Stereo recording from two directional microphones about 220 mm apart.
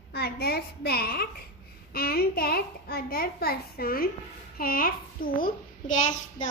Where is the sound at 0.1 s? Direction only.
45° left (ahead or behind).